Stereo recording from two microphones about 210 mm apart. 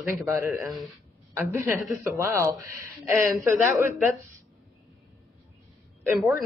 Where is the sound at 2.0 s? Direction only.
15° right (ahead or behind).